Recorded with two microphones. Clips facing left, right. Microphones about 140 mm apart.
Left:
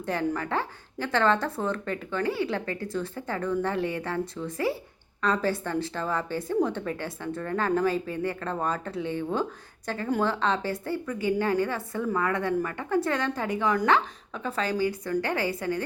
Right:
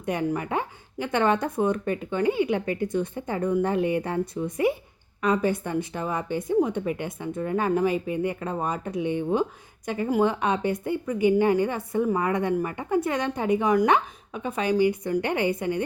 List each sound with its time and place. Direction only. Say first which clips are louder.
0.0 s a woman's voice: right 2 dB; 15° right (ahead or behind)